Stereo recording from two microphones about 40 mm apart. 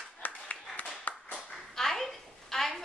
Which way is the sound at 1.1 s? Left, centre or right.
Left.